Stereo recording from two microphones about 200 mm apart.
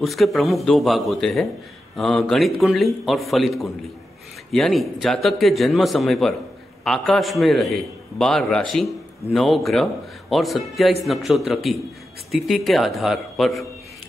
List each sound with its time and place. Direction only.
0.0 s a man's voice: centre (ahead or behind)